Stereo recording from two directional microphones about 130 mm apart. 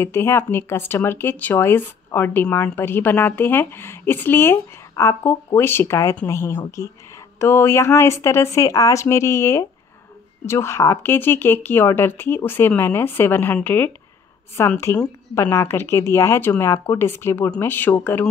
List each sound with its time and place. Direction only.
0.0 s speech: 20° left (ahead or behind)